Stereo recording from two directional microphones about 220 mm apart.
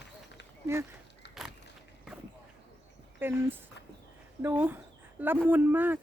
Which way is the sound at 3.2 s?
10° right (ahead or behind).